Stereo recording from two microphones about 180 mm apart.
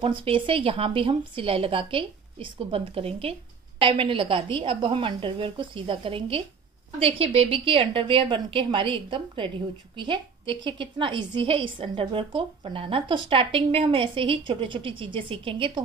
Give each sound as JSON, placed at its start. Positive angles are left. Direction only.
{"t": 0.0, "sound": "a woman's voice", "side_deg": -30}